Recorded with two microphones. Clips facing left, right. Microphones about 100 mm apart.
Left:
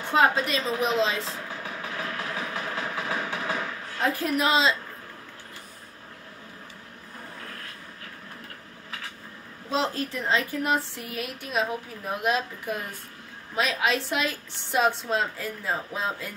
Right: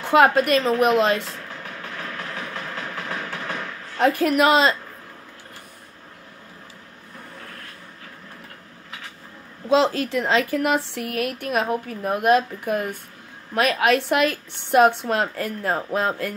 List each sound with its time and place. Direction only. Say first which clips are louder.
0.0 s a woman's voice: right 6 dB; 70° right (ahead or behind)
1.5 s a sound: even; 5° left (ahead or behind)
4.0 s a woman's voice: right 7 dB; 70° right (ahead or behind)
9.7 s speech: right 9 dB; 90° right
10.5 s a woman's voice: right 5 dB; 75° right (ahead or behind); by 16.3 s 60° right (ahead or behind)